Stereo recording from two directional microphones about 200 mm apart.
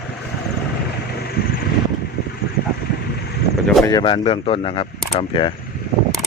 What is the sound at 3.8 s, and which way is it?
Speech, 20° left (ahead or behind).